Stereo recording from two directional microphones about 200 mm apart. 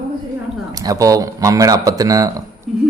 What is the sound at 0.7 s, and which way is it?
Speech, 15° right (ahead or behind).